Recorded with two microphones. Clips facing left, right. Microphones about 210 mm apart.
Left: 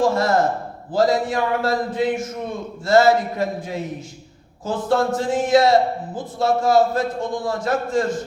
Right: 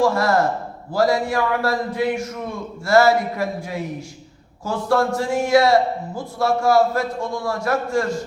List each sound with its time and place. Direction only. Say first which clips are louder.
0.0 s speech: even; 20° left (ahead or behind)